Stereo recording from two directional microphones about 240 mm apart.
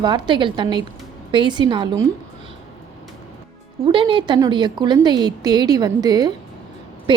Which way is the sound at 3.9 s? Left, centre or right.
Right.